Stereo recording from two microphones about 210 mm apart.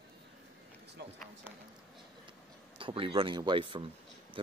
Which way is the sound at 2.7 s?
25° right (ahead or behind).